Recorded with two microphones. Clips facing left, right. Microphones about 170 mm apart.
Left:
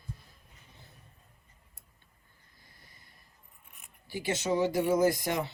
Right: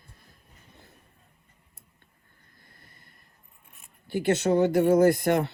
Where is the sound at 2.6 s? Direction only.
55° right (ahead or behind).